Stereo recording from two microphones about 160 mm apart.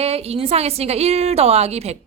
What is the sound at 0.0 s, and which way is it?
Speech, 40° right (ahead or behind).